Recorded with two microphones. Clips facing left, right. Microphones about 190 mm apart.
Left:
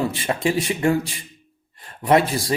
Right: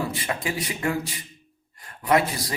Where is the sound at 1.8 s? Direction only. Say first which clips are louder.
Left 4 dB; 30° left (ahead or behind).